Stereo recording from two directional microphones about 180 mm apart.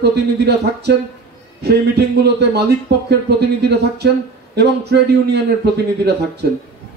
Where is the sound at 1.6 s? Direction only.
65° right (ahead or behind).